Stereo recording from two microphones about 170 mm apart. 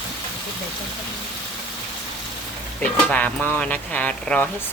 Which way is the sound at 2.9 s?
10° left (ahead or behind).